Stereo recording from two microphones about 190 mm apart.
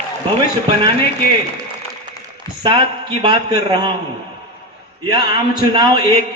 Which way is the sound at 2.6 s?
25° right (ahead or behind).